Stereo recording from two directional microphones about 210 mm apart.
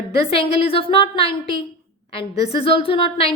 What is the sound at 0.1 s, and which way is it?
A woman's voice, 25° left (ahead or behind).